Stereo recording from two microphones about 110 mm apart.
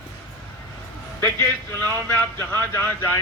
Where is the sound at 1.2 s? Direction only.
15° left (ahead or behind).